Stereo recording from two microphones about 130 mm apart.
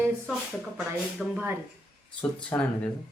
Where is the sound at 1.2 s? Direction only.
5° right (ahead or behind).